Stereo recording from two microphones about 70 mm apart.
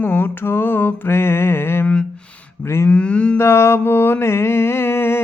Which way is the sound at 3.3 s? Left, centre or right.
Left.